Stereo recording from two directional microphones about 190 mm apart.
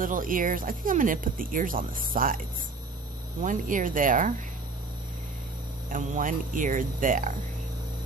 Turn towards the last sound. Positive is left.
turn(degrees=-45)  # may be behind; listen again after turning